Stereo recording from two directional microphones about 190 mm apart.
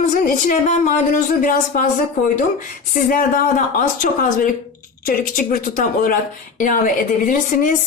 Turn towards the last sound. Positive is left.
turn(degrees=45)  # may be behind; listen again after turning